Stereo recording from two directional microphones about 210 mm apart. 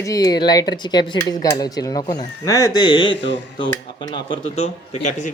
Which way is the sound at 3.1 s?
60° left (ahead or behind).